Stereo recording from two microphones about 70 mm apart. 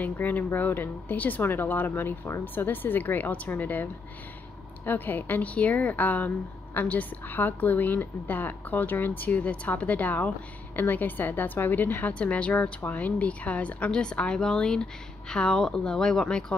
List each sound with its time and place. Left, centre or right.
0.0 s a woman's voice: left